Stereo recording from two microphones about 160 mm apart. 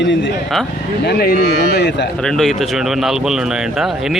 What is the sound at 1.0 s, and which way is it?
A man's voice, 75° left (ahead or behind).